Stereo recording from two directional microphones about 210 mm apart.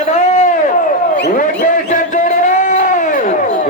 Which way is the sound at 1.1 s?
50° left (ahead or behind).